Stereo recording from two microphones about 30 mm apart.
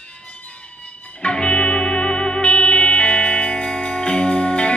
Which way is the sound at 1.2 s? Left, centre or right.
Left.